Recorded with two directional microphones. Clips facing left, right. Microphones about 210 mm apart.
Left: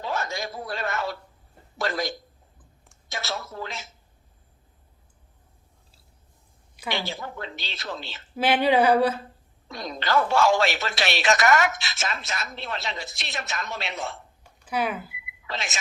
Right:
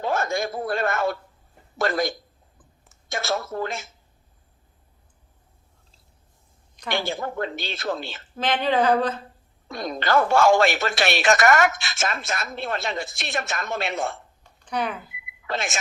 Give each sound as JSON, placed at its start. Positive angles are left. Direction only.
{"t": 0.0, "sound": "a man's voice", "side_deg": -50}
{"t": 6.9, "sound": "speech", "side_deg": -50}
{"t": 8.4, "sound": "speech", "side_deg": 10}
{"t": 9.6, "sound": "speech", "side_deg": -50}
{"t": 14.6, "sound": "speech", "side_deg": 5}
{"t": 15.4, "sound": "speech", "side_deg": -50}